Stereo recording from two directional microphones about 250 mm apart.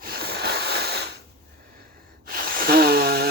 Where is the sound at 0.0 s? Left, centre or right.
Right.